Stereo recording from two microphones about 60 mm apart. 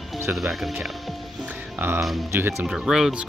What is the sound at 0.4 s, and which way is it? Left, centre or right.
Speech, centre.